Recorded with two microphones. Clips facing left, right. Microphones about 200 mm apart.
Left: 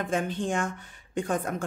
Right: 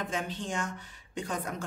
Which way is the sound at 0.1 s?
50° left (ahead or behind).